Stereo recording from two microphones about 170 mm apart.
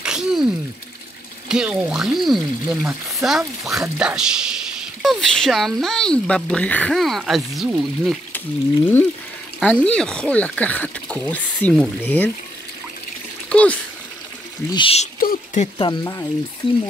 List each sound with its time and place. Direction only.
0.0 s sneeze: 5° right (ahead or behind)
1.5 s speech: 5° right (ahead or behind)
9.6 s speech: 5° left (ahead or behind)
13.5 s a sound: 10° left (ahead or behind)
14.7 s speech: 30° left (ahead or behind)
15.1 s a sound: 55° left (ahead or behind)
15.8 s speech: 25° left (ahead or behind)